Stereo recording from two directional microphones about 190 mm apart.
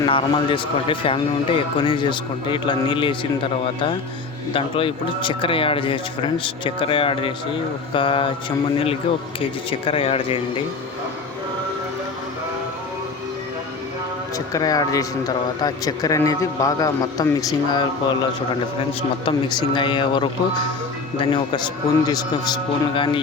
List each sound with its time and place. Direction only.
0.0 s a man's voice: 25° left (ahead or behind)
14.3 s a man's voice: 20° left (ahead or behind)